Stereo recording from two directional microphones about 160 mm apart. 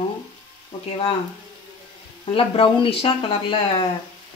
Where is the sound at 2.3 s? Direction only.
35° left (ahead or behind).